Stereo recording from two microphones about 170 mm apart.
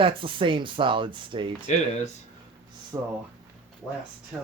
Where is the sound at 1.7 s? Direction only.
45° left (ahead or behind).